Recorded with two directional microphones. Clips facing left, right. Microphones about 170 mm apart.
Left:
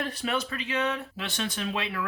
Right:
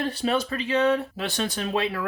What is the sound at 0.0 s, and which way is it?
Speech, 30° right (ahead or behind).